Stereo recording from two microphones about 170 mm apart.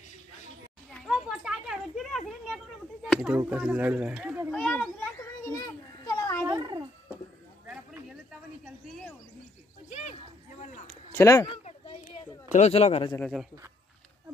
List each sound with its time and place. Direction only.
1.0 s a sound: 5° right (ahead or behind)
4.5 s children playing: 5° left (ahead or behind)
6.4 s a sound: 20° right (ahead or behind)
11.1 s speech: 15° left (ahead or behind)
12.5 s speech: 40° left (ahead or behind)
13.2 s a man's voice: centre (ahead or behind)